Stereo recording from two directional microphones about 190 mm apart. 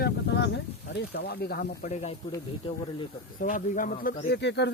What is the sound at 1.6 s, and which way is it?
Speech, 35° left (ahead or behind).